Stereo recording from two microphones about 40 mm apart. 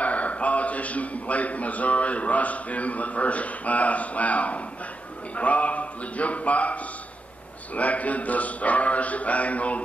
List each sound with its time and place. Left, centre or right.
0.0 s a man's voice: left